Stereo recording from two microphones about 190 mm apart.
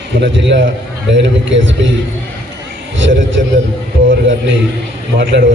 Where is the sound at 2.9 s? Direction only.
80° right.